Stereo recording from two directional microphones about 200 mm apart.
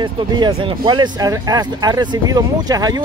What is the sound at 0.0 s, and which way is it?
Speech, 20° right (ahead or behind).